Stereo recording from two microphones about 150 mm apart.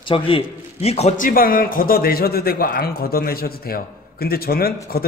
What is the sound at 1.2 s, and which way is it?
A man's voice, 75° left (ahead or behind).